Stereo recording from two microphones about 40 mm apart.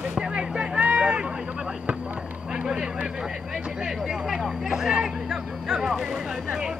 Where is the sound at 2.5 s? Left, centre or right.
Right.